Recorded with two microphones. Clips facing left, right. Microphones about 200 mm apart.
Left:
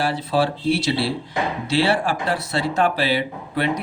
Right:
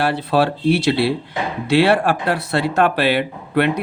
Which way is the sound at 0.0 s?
65° right (ahead or behind).